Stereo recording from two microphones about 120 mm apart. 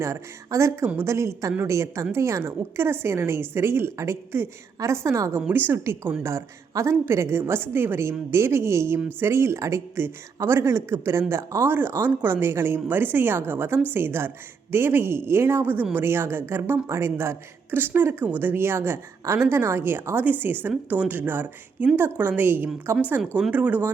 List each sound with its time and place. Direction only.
0.0 s a woman's voice: 25° right (ahead or behind)